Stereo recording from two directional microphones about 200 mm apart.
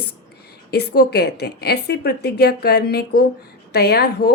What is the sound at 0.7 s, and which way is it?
A woman's voice, 55° left (ahead or behind).